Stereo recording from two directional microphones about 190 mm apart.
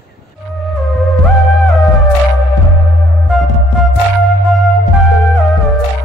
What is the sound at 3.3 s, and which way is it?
Music, centre (ahead or behind).